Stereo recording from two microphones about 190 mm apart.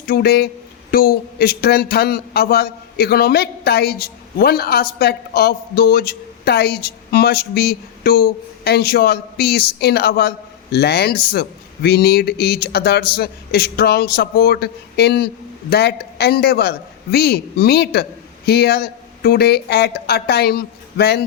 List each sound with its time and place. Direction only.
0.1 s speech: 55° left (ahead or behind)